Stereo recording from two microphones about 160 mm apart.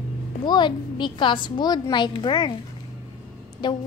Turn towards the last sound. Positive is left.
turn(degrees=30)  # may be behind; listen again after turning